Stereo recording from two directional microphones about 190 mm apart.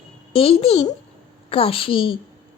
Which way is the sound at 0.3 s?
30° left (ahead or behind).